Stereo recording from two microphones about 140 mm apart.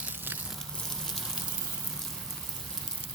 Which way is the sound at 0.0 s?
15° right (ahead or behind).